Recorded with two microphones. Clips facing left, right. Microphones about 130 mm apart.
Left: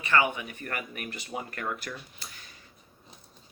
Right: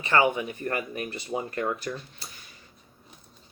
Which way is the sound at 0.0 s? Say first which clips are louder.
Right 3 dB; 25° right (ahead or behind).